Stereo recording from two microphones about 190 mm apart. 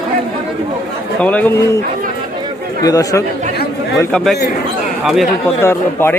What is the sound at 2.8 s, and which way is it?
Speech, 20° left (ahead or behind).